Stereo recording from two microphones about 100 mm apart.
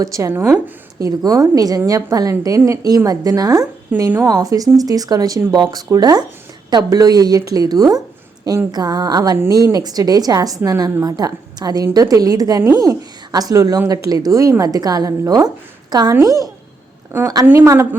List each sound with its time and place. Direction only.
0.0 s speech: 30° right (ahead or behind)
0.9 s a woman's voice: 35° right (ahead or behind)
17.1 s a woman's voice: 25° right (ahead or behind)